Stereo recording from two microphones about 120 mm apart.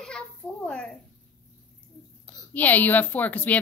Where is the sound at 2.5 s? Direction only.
15° left (ahead or behind).